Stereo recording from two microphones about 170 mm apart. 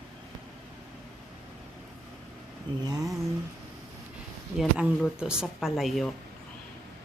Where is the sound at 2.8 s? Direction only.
25° right (ahead or behind).